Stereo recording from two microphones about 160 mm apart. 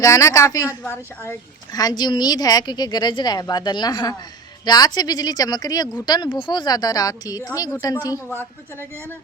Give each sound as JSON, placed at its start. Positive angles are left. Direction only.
{"t": 0.0, "sound": "a woman's voice", "side_deg": 20}
{"t": 1.7, "sound": "speech", "side_deg": 25}